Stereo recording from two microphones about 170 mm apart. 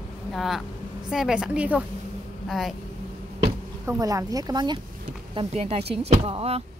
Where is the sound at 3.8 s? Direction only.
20° right (ahead or behind).